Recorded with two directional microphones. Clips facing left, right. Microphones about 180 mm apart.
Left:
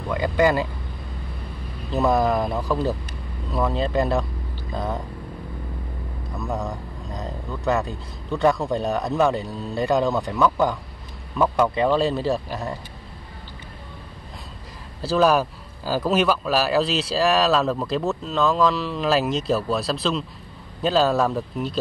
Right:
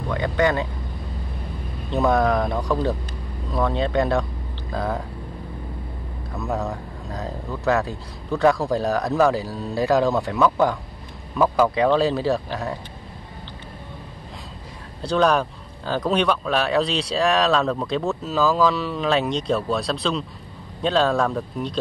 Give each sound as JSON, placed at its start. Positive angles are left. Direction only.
{"t": 0.1, "sound": "speech", "side_deg": 5}
{"t": 1.9, "sound": "speech", "side_deg": 0}
{"t": 6.3, "sound": "speech", "side_deg": 0}
{"t": 15.0, "sound": "speech", "side_deg": 5}